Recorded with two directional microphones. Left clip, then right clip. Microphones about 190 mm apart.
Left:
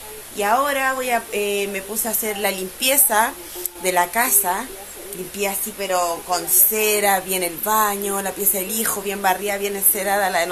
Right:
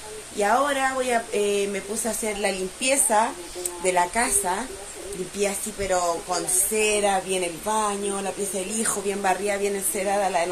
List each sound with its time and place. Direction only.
0.4 s speech: centre (ahead or behind); by 8.8 s 15° left (ahead or behind)
8.8 s speech: 5° left (ahead or behind)